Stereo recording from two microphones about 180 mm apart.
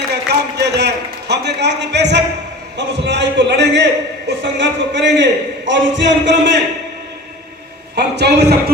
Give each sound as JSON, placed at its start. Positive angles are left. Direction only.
{"t": 0.1, "sound": "a man's voice", "side_deg": -70}
{"t": 7.9, "sound": "a man's voice", "side_deg": -70}